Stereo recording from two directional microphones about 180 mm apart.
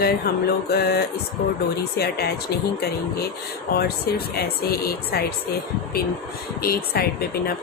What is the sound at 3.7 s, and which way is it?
Speech, 60° left (ahead or behind).